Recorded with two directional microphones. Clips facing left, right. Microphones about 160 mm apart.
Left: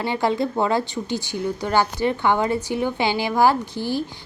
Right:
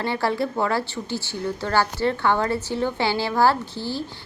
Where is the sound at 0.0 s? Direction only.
15° left (ahead or behind).